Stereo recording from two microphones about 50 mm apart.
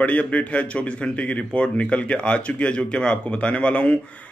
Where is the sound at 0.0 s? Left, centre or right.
Left.